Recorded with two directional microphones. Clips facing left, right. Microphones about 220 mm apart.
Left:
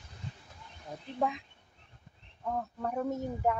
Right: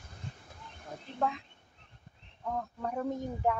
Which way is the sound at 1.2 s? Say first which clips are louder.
Left 1 dB; 15° left (ahead or behind).